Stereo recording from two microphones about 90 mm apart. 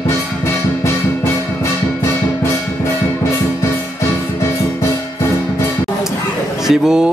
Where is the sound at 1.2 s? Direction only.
30° left (ahead or behind).